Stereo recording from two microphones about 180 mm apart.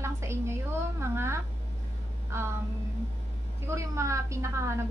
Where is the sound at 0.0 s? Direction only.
15° right (ahead or behind).